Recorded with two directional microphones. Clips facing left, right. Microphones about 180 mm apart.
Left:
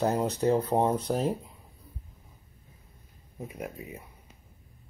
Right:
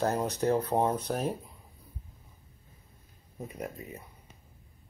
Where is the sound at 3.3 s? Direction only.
5° left (ahead or behind).